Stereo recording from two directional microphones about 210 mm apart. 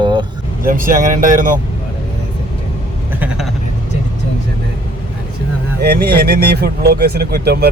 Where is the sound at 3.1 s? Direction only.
5° right (ahead or behind).